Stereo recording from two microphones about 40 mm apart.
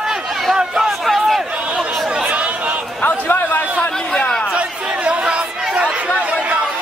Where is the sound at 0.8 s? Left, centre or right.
Centre.